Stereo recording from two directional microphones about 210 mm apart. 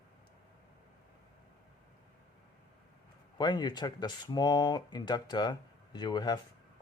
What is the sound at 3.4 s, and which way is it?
Speech, 20° left (ahead or behind).